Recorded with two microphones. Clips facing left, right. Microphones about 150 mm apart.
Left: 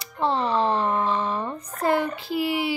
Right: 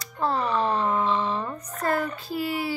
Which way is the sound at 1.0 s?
45° left (ahead or behind).